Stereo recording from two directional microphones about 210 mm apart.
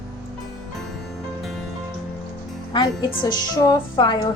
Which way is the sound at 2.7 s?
20° left (ahead or behind).